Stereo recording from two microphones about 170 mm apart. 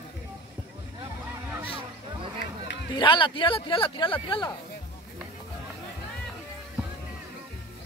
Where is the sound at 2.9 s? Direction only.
30° left (ahead or behind).